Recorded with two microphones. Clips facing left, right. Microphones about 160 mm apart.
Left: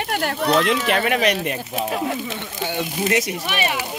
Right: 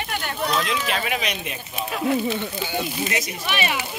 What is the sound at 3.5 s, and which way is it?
Speech, 40° left (ahead or behind).